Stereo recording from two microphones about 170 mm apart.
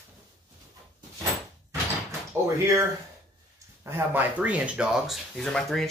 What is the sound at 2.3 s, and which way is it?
Speech, 15° right (ahead or behind).